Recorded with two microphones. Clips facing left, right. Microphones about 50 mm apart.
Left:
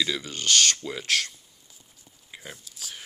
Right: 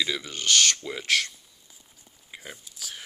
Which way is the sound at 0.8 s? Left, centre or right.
Right.